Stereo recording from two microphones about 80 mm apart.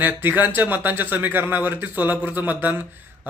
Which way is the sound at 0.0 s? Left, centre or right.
Right.